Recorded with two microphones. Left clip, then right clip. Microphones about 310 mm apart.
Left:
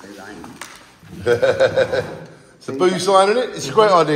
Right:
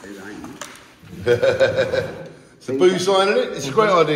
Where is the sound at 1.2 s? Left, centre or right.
Left.